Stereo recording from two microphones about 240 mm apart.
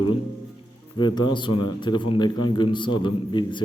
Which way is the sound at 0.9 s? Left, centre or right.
Centre.